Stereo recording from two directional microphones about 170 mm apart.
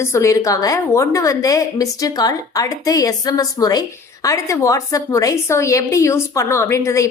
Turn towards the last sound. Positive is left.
turn(degrees=15)  # may be behind; listen again after turning